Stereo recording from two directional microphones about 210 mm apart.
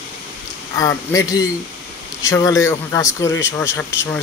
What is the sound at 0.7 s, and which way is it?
A man's voice, 15° left (ahead or behind).